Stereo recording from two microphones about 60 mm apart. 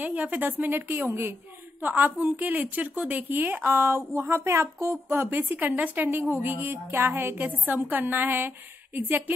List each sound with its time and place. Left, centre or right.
0.0 s a woman's voice: right
4.9 s a woman's voice: right